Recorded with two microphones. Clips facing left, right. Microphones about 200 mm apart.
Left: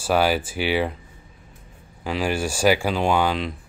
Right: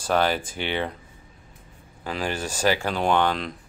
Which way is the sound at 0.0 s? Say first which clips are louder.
Left 3 dB; 10° left (ahead or behind).